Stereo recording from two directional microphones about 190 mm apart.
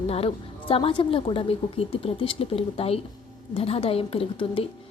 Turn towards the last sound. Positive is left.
turn(degrees=30)  # may be behind; listen again after turning